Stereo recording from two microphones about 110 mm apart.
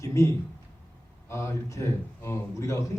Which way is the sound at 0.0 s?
25° left (ahead or behind).